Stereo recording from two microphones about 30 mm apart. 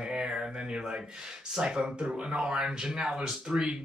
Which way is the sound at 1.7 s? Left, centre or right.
Right.